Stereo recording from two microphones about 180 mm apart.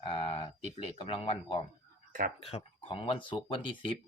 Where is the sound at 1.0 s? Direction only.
30° left (ahead or behind).